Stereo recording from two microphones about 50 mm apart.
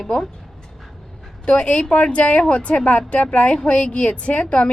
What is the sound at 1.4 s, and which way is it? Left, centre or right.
A woman's voice, left.